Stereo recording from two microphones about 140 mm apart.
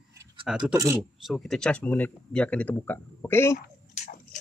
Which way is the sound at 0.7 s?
20° right (ahead or behind).